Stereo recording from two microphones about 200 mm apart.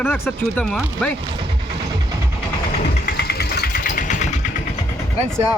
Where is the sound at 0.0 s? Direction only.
10° left (ahead or behind).